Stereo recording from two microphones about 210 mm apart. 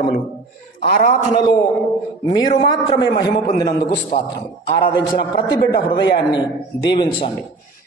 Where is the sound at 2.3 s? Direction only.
20° left (ahead or behind).